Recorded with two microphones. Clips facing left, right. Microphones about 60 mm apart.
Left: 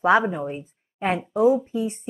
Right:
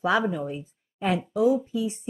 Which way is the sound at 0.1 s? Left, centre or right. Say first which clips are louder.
Left 4 dB; left.